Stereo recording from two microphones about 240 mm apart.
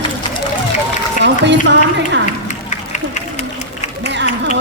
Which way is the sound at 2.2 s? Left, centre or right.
Left.